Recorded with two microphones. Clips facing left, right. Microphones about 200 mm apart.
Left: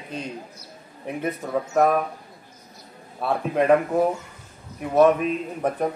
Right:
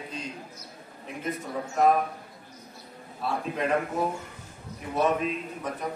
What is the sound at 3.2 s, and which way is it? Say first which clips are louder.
Speech: left 7 dB; 60° left (ahead or behind).